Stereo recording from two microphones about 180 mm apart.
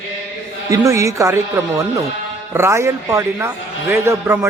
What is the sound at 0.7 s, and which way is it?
A man's voice, 15° right (ahead or behind).